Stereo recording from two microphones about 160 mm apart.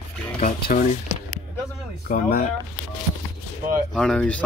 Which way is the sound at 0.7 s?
60° left (ahead or behind).